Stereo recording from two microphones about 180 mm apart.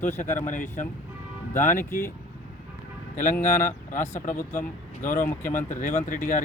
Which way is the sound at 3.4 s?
45° left (ahead or behind).